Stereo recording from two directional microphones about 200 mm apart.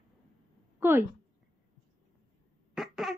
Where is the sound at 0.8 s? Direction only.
10° right (ahead or behind).